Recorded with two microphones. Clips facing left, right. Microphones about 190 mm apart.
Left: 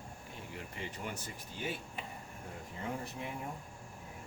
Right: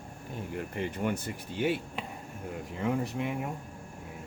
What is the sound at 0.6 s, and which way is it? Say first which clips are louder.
Speech: right 11 dB; 55° right (ahead or behind).